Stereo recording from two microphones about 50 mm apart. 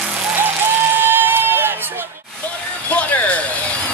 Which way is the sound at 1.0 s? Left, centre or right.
Right.